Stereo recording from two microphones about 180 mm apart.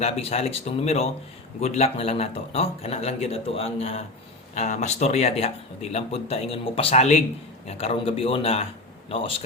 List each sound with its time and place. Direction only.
0.0 s speech: 35° left (ahead or behind)